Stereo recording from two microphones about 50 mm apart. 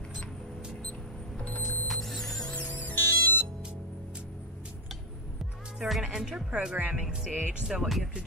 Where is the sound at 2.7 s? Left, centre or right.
Left.